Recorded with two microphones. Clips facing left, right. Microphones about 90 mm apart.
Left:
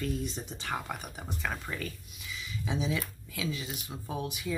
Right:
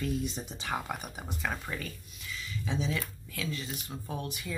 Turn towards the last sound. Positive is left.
turn(degrees=5)  # may be behind; listen again after turning